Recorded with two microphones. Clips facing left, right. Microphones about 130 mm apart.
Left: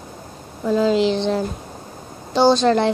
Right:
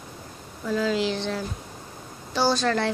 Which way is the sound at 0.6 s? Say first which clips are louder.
Left 8 dB; 25° left (ahead or behind).